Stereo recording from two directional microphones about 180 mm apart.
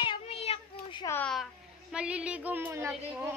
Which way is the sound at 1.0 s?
15° left (ahead or behind).